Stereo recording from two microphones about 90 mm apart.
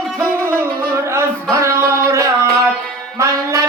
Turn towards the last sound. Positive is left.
turn(degrees=-35)  # may be behind; listen again after turning